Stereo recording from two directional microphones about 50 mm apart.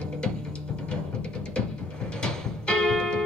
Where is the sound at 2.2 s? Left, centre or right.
Centre.